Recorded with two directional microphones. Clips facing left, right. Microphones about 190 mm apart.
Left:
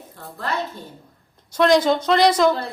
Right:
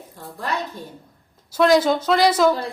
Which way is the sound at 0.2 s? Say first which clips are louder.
Even; 15° right (ahead or behind).